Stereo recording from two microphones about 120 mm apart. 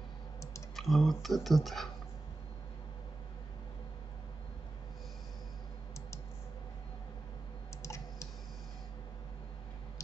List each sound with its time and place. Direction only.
0.7 s speech: centre (ahead or behind)
7.8 s clicking: 25° left (ahead or behind)